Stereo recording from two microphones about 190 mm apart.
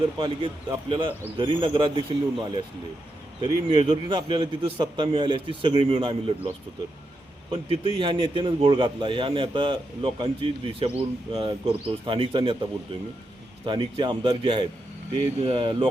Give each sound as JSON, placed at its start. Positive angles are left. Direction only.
{"t": 0.9, "sound": "a man's voice", "side_deg": -25}
{"t": 7.5, "sound": "a man's voice", "side_deg": -25}